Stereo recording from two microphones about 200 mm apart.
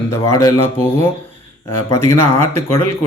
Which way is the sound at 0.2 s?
20° left (ahead or behind).